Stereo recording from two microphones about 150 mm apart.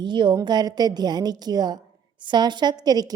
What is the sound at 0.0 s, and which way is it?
A woman's voice, 30° right (ahead or behind).